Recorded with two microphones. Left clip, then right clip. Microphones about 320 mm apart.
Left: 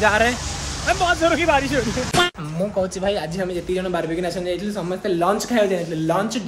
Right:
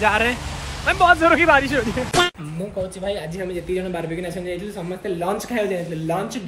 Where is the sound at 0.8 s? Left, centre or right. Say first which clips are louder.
Right 4 dB; centre.